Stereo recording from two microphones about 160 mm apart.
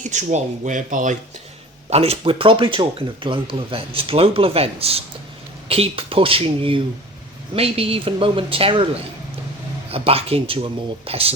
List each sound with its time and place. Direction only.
0.0 s speech: 50° right (ahead or behind)
1.9 s speech: 40° right (ahead or behind)
9.9 s speech: 35° right (ahead or behind)